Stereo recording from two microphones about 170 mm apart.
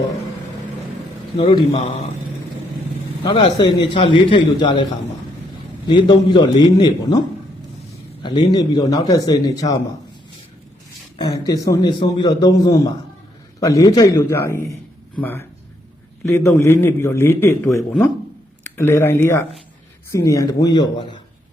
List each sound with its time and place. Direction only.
1.4 s a man's voice: 30° left (ahead or behind)
3.2 s a man's voice: 30° left (ahead or behind)
5.9 s a man's voice: 25° left (ahead or behind)
11.2 s a man's voice: 20° left (ahead or behind)